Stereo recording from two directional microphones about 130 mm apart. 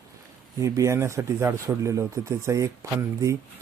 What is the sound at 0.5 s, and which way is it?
Speech, 25° right (ahead or behind).